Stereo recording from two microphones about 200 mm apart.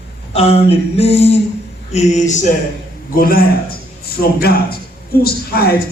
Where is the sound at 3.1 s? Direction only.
45° left (ahead or behind).